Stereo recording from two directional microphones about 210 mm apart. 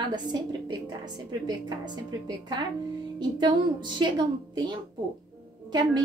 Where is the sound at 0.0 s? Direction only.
20° right (ahead or behind).